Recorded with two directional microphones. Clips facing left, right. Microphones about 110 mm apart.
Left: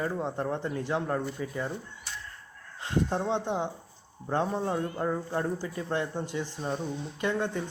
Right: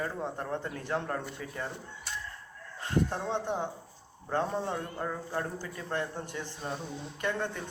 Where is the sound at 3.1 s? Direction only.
20° left (ahead or behind).